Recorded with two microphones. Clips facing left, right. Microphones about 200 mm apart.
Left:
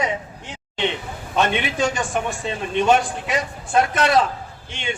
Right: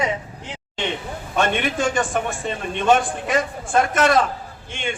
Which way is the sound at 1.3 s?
50° right (ahead or behind).